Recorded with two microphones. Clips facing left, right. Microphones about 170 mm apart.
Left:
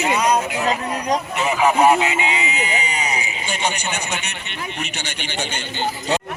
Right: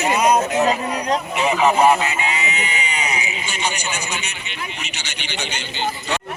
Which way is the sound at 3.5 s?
55° left (ahead or behind).